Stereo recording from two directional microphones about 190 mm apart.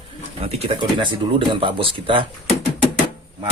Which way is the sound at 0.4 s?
35° right (ahead or behind).